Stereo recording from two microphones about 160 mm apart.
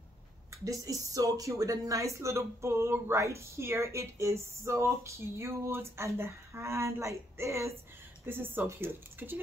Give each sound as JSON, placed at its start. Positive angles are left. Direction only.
{"t": 0.7, "sound": "speech", "side_deg": -20}